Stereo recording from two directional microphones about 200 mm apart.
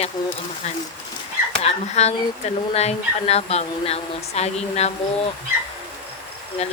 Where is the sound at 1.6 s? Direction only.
35° left (ahead or behind).